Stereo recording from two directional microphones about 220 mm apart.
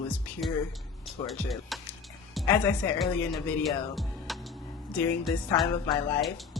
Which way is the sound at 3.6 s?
Centre (ahead or behind).